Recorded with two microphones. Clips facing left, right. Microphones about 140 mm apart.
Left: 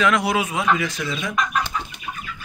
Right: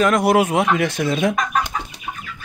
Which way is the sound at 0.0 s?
50° right (ahead or behind).